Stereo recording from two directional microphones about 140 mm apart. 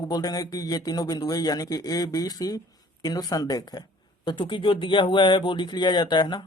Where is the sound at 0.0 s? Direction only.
30° left (ahead or behind).